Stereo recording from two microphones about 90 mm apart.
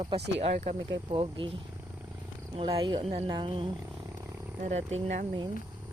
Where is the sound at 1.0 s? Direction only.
65° right (ahead or behind).